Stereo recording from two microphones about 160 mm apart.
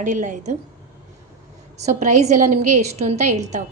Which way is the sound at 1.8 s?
45° right (ahead or behind).